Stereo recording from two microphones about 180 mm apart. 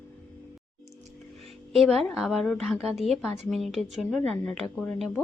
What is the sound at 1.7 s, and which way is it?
Speech, centre (ahead or behind).